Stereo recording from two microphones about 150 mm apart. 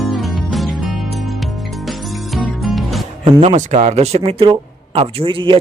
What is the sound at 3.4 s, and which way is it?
A man's voice, 50° right (ahead or behind).